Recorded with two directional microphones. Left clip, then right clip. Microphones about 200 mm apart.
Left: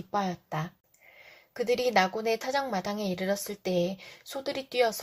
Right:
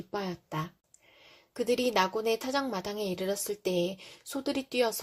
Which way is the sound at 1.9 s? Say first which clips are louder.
Left 2 dB; 35° right (ahead or behind).